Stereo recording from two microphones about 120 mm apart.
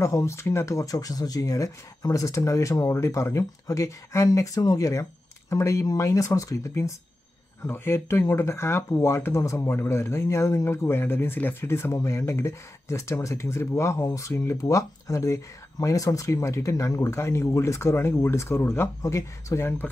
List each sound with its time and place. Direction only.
0.0 s speech: 25° left (ahead or behind)